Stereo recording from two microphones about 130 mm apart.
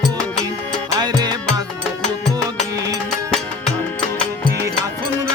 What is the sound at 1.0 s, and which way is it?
Music, 30° right (ahead or behind).